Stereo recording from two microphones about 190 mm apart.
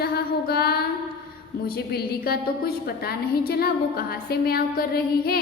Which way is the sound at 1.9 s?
55° left (ahead or behind).